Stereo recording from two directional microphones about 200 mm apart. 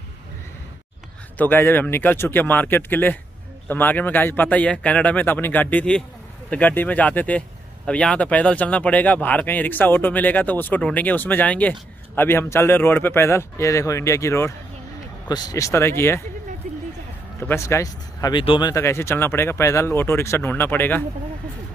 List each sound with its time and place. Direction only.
1.4 s speech: 10° left (ahead or behind)
17.4 s speech: 10° left (ahead or behind)